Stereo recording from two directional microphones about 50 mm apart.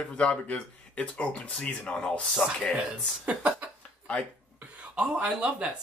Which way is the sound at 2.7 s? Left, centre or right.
Centre.